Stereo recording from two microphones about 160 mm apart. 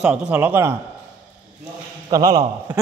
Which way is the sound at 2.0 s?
25° right (ahead or behind).